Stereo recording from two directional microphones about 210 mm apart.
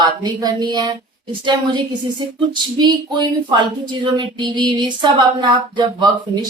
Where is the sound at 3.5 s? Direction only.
20° right (ahead or behind).